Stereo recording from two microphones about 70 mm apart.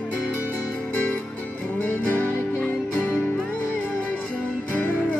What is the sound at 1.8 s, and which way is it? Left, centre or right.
Music, left.